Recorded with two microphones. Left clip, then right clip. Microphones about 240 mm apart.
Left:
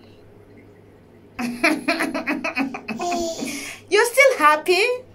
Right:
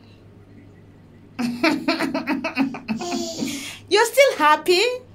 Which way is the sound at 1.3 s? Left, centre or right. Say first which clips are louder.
Left 1 dB; centre.